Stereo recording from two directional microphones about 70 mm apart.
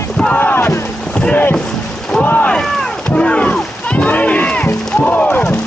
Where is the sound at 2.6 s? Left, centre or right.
Centre.